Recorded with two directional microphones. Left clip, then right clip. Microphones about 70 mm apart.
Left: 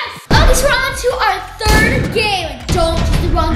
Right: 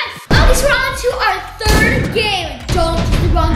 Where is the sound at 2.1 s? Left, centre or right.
Centre.